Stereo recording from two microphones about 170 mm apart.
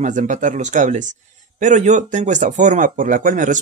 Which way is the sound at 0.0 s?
45° right (ahead or behind).